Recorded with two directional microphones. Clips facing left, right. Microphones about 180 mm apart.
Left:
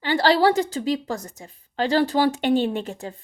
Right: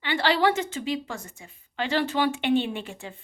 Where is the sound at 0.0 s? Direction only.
40° left (ahead or behind).